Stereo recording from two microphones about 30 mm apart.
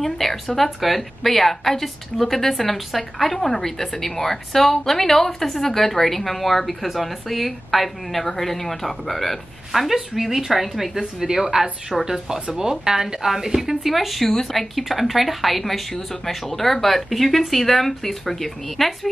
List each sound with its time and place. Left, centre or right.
0.0 s a woman's voice: centre
11.3 s speech: centre